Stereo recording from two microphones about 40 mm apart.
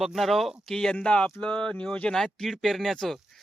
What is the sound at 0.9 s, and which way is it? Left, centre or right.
Speech, left.